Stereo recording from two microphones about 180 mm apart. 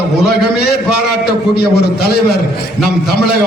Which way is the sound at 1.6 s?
60° left (ahead or behind).